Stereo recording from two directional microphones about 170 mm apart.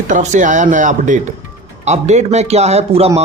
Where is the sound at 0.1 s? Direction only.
45° right (ahead or behind).